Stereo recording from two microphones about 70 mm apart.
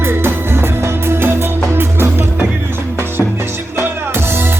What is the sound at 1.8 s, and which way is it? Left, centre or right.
Music, right.